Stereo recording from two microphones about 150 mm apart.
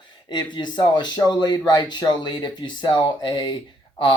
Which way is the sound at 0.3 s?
30° left (ahead or behind).